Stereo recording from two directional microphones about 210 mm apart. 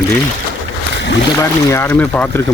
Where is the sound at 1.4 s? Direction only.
15° left (ahead or behind).